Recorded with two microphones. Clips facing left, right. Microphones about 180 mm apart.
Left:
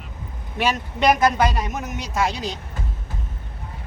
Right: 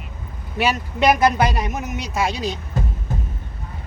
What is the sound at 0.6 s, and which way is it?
Speech, 10° right (ahead or behind).